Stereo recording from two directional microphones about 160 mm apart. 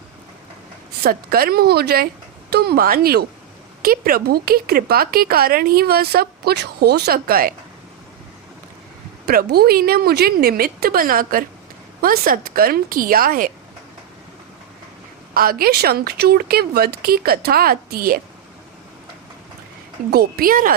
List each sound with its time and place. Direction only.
1.0 s speech: 70° right (ahead or behind)
9.2 s a woman's voice: 75° right (ahead or behind)
15.4 s speech: 65° right (ahead or behind)
20.1 s a woman's voice: 75° right (ahead or behind)